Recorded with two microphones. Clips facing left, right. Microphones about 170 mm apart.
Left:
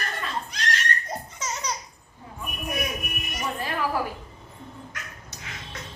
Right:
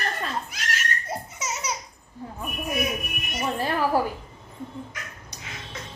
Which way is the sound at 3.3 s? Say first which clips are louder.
Right 4 dB; 30° right (ahead or behind).